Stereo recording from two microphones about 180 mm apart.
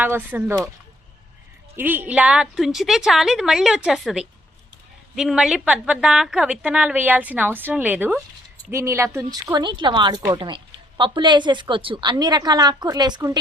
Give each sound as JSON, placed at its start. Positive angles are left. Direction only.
{"t": 0.0, "sound": "a woman's voice", "side_deg": -10}
{"t": 1.7, "sound": "a woman's voice", "side_deg": -10}